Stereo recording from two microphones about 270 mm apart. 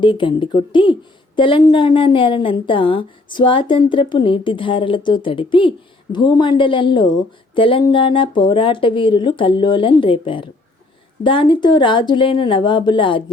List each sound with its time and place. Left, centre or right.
0.0 s a woman's voice: centre